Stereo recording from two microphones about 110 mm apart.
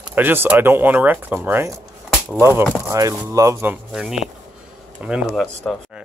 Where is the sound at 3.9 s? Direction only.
5° right (ahead or behind).